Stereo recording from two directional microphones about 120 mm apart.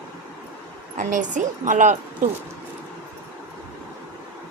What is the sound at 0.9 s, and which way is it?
A woman's voice, 90° right.